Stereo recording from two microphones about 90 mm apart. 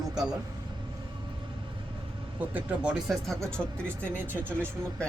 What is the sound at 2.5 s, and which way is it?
Speech, 15° right (ahead or behind).